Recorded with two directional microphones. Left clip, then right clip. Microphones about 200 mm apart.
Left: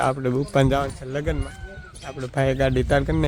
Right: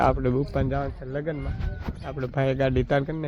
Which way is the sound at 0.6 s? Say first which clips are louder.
Left 7 dB; 40° left (ahead or behind).